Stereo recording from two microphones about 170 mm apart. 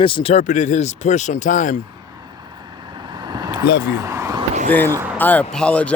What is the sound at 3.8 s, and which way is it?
Speech, 20° right (ahead or behind).